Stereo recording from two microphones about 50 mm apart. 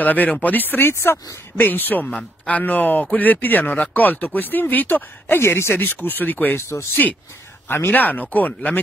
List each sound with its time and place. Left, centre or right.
0.0 s speech: left
6.7 s speech: left
7.6 s speech: left
7.9 s speech: left